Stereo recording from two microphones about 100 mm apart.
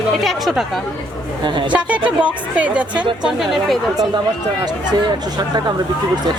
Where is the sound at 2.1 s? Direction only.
15° right (ahead or behind).